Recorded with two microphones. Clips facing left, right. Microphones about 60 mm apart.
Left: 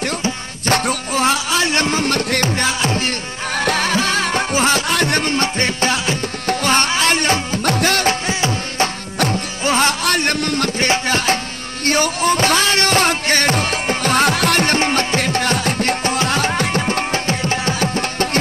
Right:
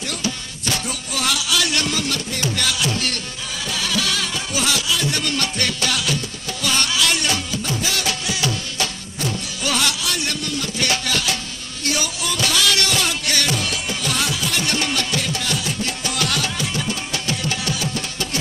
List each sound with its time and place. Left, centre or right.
0.7 s music: left
1.2 s a sound: left
2.5 s music: left
3.5 s music: left
5.2 s music: left
9.7 s a sound: left
10.8 s music: left
14.8 s music: left